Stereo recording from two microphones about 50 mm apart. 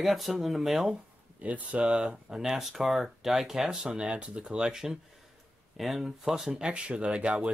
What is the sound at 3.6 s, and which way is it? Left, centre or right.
Speech, centre.